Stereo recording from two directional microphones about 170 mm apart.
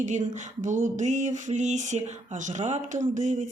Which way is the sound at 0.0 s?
45° right (ahead or behind).